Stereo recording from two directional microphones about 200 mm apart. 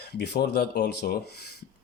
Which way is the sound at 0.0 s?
55° left (ahead or behind).